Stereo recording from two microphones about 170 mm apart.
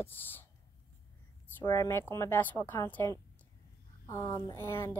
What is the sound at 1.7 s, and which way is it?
A woman's voice, 15° left (ahead or behind).